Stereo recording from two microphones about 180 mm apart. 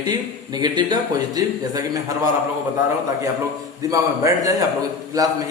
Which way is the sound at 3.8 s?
20° right (ahead or behind).